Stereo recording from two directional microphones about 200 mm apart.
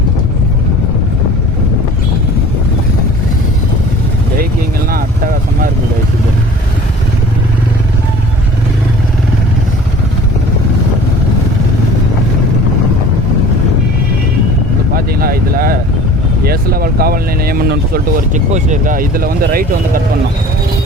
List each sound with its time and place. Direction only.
4.9 s vehicle: 45° right (ahead or behind)
14.9 s vehicle: 50° right (ahead or behind)
16.4 s speech: 50° right (ahead or behind)